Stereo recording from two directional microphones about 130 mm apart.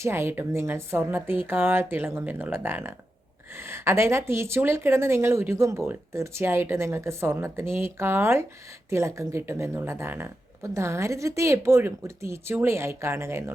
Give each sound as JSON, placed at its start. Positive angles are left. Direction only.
{"t": 0.0, "sound": "a woman's voice", "side_deg": -20}